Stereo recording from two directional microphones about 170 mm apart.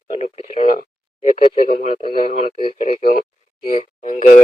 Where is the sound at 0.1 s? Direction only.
35° left (ahead or behind).